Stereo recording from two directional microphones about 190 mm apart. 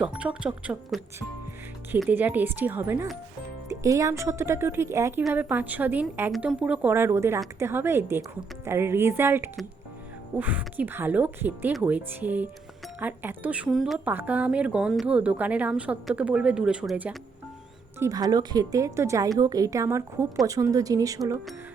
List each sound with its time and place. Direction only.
0.0 s speech: 5° right (ahead or behind)
2.0 s speech: 10° right (ahead or behind)
18.0 s speech: 20° right (ahead or behind)